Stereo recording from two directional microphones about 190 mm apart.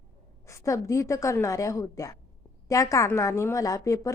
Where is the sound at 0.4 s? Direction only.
15° left (ahead or behind).